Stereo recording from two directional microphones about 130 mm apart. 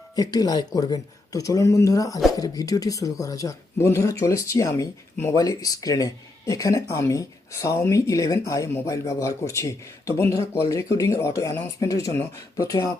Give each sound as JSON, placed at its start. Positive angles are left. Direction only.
{"t": 0.2, "sound": "speech", "side_deg": 30}